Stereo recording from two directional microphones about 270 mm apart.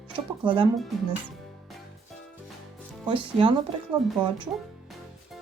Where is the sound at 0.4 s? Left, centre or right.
Centre.